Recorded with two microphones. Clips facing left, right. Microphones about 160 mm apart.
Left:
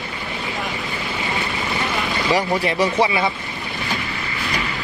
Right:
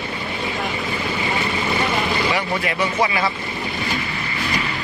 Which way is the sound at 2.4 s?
35° left (ahead or behind).